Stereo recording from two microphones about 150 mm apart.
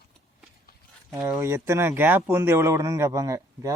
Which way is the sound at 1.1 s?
20° right (ahead or behind).